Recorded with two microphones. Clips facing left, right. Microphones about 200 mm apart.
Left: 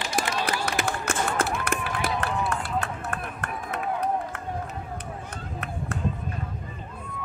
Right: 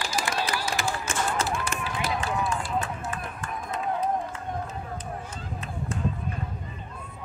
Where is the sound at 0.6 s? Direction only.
65° left (ahead or behind).